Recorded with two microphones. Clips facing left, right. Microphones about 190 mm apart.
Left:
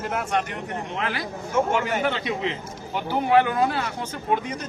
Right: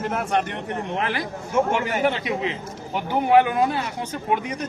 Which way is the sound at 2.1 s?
15° right (ahead or behind).